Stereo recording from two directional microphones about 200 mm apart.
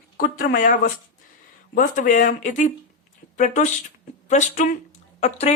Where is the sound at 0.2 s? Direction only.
45° left (ahead or behind).